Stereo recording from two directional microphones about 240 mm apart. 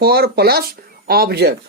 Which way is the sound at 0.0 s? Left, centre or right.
Right.